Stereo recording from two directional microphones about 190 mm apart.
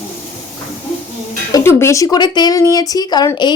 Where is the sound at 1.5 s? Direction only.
15° left (ahead or behind).